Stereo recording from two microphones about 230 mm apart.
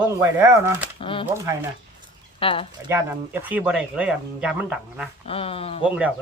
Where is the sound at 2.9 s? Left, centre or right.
Centre.